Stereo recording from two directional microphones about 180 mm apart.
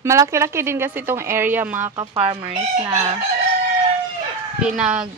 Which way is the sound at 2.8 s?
15° right (ahead or behind).